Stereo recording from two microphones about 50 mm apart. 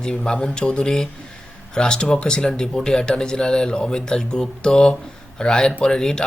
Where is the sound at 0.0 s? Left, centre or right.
Centre.